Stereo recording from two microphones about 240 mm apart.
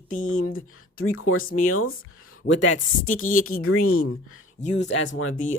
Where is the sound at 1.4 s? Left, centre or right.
Left.